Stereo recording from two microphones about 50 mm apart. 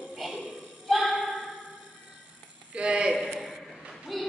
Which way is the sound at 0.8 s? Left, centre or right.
Centre.